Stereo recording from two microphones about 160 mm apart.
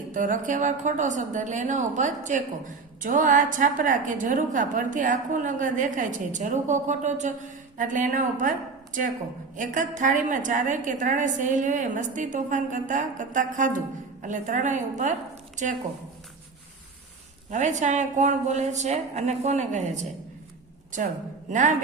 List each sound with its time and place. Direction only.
0.1 s a woman's voice: 55° right (ahead or behind)
17.5 s a woman's voice: 50° right (ahead or behind)